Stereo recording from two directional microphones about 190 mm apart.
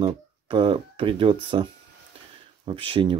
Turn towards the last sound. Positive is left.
turn(degrees=-30)  # may be behind; listen again after turning